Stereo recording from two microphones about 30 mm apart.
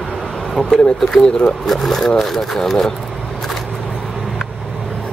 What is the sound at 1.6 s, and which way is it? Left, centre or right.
Speech, centre.